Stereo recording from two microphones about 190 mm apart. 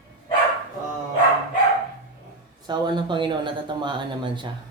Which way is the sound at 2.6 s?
25° right (ahead or behind).